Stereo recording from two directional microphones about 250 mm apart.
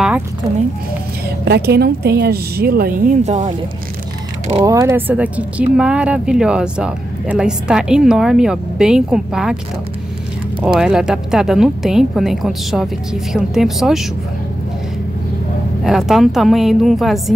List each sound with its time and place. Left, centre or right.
1.4 s a woman's voice: right
4.6 s speech: centre
10.6 s speech: centre
15.8 s speech: centre